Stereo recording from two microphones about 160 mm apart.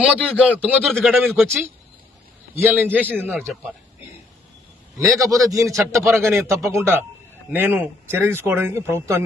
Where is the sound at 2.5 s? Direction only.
10° right (ahead or behind).